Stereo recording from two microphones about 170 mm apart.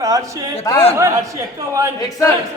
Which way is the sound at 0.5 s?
15° left (ahead or behind).